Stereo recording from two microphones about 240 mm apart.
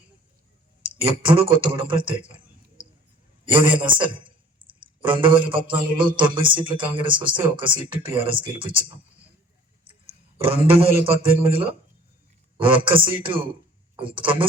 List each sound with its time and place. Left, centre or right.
0.9 s speech: right
3.5 s speech: right
4.6 s a sound: right
5.0 s speech: right
10.3 s speech: right